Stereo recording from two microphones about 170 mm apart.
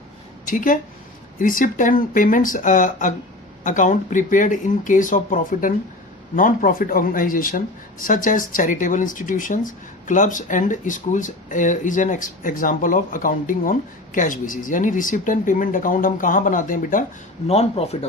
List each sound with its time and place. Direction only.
0.4 s speech: 50° left (ahead or behind)
17.5 s speech: 35° left (ahead or behind)